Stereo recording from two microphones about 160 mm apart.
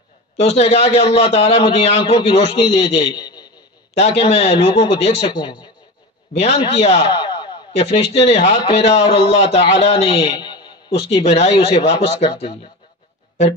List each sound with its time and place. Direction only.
0.4 s a man's voice: 40° left (ahead or behind)
3.2 s a sound: 25° left (ahead or behind)
3.9 s a man's voice: 40° left (ahead or behind)
5.2 s a man's voice: 30° left (ahead or behind)
6.3 s a man's voice: 40° left (ahead or behind)
7.1 s a man's voice: 30° left (ahead or behind)
10.3 s a man's voice: 25° left (ahead or behind)